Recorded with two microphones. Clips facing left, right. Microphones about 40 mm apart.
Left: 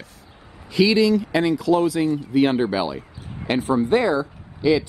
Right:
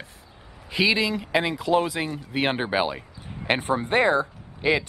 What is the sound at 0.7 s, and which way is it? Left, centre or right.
Speech, right.